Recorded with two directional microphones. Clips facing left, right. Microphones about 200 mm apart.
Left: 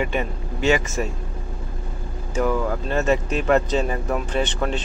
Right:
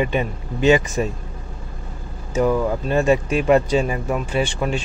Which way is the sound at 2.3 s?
15° right (ahead or behind).